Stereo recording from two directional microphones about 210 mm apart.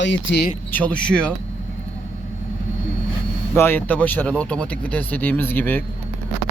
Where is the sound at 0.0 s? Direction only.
60° left (ahead or behind).